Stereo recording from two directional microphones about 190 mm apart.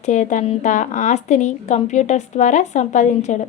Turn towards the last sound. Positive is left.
turn(degrees=40)  # may be behind; listen again after turning